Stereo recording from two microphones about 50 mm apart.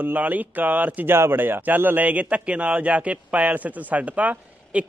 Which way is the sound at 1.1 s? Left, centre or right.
Right.